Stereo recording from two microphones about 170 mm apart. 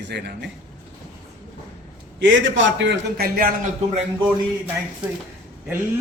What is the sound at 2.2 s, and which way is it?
A man's voice, 90° right.